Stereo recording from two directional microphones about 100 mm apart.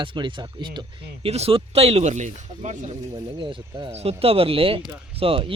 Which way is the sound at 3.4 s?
75° right (ahead or behind).